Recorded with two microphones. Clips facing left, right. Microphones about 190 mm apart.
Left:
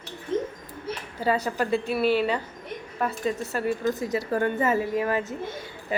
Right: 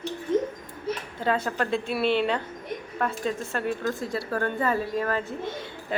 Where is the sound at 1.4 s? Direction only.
10° left (ahead or behind).